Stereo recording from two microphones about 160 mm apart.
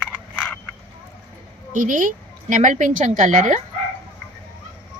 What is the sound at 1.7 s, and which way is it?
A woman's voice, 55° right (ahead or behind).